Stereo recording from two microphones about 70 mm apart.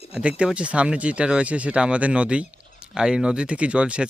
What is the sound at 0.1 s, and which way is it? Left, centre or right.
Speech, centre.